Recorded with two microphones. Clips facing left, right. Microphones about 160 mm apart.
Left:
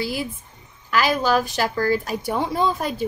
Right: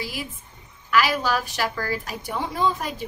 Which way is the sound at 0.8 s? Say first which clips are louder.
Left 2 dB; 30° left (ahead or behind).